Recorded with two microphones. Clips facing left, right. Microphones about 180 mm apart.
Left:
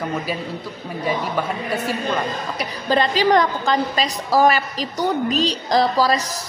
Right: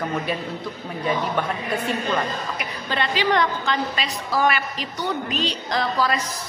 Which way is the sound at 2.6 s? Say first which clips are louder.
Left 10 dB; 40° left (ahead or behind).